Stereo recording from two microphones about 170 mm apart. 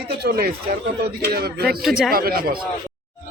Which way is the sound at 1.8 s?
Centre (ahead or behind).